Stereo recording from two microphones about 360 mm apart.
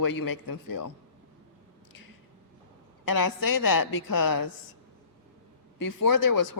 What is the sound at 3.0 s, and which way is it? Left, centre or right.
A woman's voice, left.